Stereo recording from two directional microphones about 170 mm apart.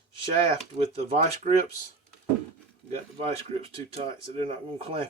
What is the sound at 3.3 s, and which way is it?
Speech, 35° right (ahead or behind).